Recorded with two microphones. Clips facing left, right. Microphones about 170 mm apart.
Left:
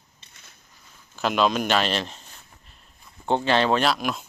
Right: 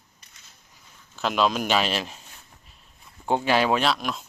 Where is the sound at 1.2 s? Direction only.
Centre (ahead or behind).